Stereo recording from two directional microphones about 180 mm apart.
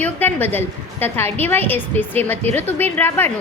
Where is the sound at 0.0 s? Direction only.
10° left (ahead or behind).